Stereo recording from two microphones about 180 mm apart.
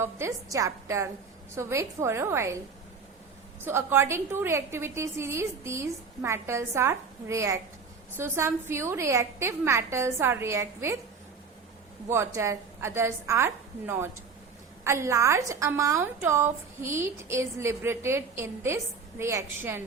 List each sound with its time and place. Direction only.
0.0 s a woman's voice: 15° right (ahead or behind)
3.6 s a woman's voice: 15° right (ahead or behind)
12.1 s a woman's voice: 15° right (ahead or behind)